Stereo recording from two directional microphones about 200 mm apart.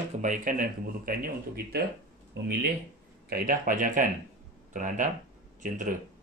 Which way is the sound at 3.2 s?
45° right (ahead or behind).